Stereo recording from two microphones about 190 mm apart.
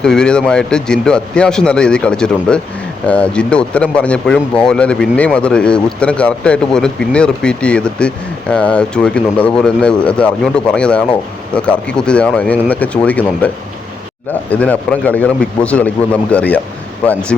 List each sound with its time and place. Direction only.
0.0 s a man's voice: 5° left (ahead or behind)
14.5 s a man's voice: 10° left (ahead or behind)